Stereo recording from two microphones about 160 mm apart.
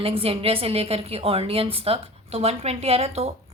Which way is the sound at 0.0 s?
35° right (ahead or behind).